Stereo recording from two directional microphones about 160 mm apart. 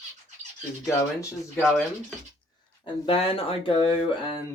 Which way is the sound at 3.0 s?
35° left (ahead or behind).